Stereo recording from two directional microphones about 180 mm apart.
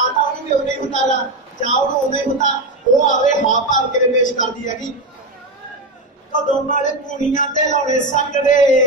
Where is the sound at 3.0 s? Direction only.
45° left (ahead or behind).